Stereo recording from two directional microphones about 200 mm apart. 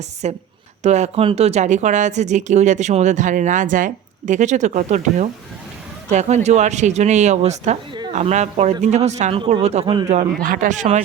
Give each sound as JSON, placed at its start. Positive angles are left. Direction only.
{"t": 0.2, "sound": "speech", "side_deg": -35}
{"t": 10.4, "sound": "speech", "side_deg": -40}